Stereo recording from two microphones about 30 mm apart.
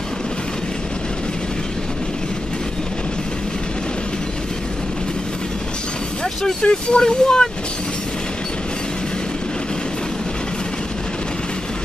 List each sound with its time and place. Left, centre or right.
6.4 s speech: left